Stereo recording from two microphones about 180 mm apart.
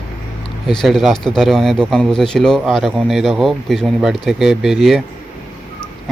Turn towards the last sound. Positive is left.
turn(degrees=0)  # may be behind; listen again after turning